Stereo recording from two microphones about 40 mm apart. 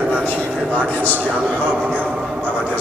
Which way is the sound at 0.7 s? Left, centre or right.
Right.